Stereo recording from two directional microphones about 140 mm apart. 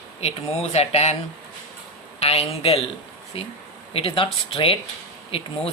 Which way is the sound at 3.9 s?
40° left (ahead or behind).